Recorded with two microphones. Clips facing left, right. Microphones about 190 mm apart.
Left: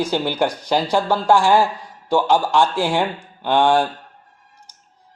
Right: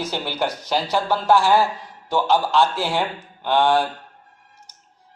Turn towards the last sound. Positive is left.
turn(degrees=10)  # may be behind; listen again after turning